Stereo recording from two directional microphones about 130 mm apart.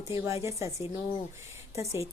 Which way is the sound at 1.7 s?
20° right (ahead or behind).